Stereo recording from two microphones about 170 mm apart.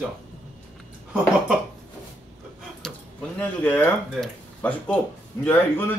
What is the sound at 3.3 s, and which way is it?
Speech, 10° left (ahead or behind).